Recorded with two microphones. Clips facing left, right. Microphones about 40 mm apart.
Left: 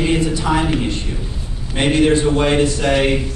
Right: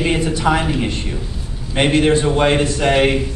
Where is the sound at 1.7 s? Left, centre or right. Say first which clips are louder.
Even; right.